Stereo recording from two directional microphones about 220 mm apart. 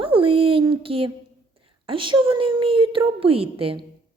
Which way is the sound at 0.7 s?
25° right (ahead or behind).